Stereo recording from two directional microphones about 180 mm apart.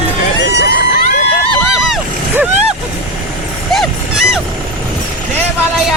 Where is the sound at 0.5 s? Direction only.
65° left (ahead or behind).